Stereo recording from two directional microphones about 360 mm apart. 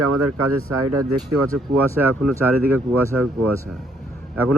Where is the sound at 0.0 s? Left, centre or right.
Right.